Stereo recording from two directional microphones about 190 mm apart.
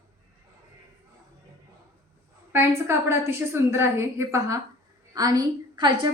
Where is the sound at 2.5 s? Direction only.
15° right (ahead or behind).